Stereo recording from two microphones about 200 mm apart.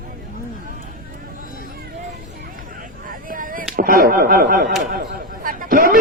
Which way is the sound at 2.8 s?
45° right (ahead or behind).